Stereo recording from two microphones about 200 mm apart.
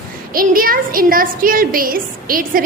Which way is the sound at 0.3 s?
45° right (ahead or behind).